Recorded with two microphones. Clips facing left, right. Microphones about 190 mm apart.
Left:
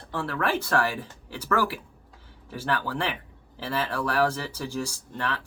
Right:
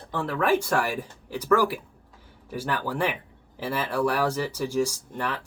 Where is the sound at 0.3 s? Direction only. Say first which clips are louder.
Right 4 dB; 15° right (ahead or behind).